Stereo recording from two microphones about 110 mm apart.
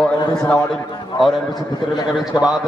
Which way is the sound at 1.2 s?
40° left (ahead or behind).